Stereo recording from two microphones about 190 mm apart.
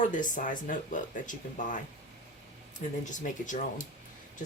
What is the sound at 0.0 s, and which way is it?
Speech, 45° left (ahead or behind).